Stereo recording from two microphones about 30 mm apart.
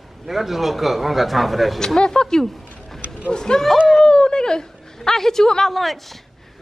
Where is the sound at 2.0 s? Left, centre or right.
Left.